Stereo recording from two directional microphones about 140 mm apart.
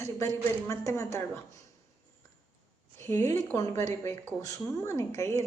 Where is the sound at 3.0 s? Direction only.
20° left (ahead or behind).